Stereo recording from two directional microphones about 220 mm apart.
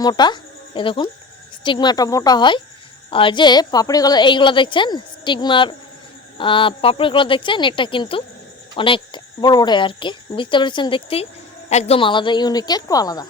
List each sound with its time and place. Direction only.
0.0 s a woman's voice: 20° left (ahead or behind)